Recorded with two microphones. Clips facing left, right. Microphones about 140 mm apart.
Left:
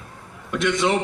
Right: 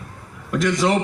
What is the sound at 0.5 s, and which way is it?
Speech, centre (ahead or behind).